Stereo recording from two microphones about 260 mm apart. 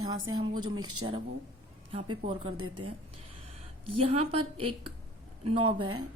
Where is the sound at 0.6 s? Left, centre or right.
Right.